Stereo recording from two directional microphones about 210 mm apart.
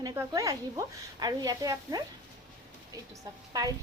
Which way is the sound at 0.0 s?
15° right (ahead or behind).